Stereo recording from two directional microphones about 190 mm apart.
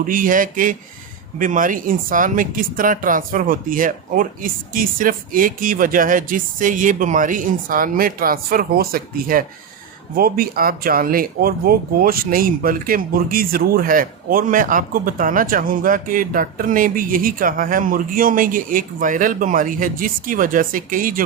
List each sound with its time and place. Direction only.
0.0 s speech: 45° right (ahead or behind)